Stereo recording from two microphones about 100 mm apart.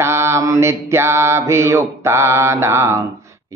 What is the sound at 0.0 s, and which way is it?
Mantra, 25° right (ahead or behind).